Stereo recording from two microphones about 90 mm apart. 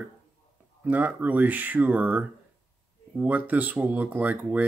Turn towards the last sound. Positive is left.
turn(degrees=-20)  # may be behind; listen again after turning